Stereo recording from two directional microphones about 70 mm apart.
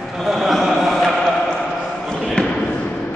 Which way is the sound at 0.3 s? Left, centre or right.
Centre.